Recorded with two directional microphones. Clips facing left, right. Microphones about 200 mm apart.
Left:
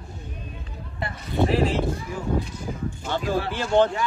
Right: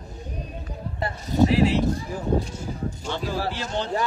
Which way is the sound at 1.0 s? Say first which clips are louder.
Right 2 dB; 40° right (ahead or behind).